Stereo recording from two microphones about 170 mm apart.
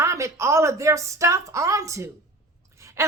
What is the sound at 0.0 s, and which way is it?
A woman's voice, 15° right (ahead or behind).